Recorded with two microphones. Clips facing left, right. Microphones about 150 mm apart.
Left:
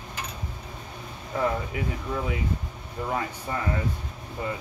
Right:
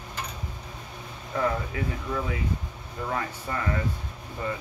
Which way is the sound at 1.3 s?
10° left (ahead or behind).